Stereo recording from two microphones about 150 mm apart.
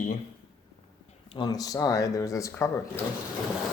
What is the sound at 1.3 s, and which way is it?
Speech, 30° left (ahead or behind).